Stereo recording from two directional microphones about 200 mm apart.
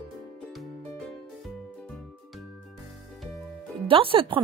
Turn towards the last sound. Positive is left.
turn(degrees=-25)  # may be behind; listen again after turning